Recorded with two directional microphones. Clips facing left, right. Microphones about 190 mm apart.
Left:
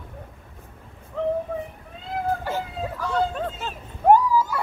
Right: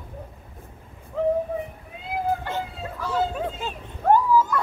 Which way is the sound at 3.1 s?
5° right (ahead or behind).